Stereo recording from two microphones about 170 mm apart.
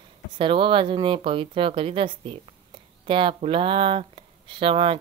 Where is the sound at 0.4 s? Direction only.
30° right (ahead or behind).